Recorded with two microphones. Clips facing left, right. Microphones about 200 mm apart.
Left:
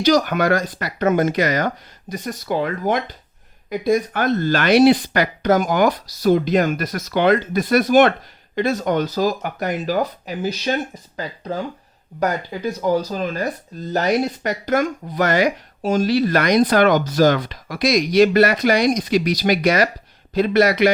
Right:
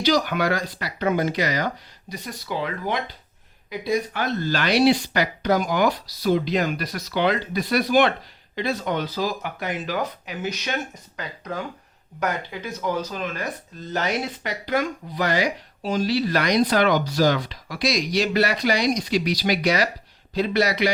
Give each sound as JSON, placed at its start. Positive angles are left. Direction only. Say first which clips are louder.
{"t": 0.0, "sound": "speech", "louder": "left 5 dB", "side_deg": 45}